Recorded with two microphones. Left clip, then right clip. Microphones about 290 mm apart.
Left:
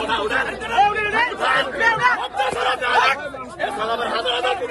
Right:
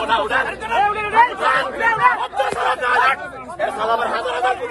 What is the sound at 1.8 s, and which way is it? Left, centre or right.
Speech, centre.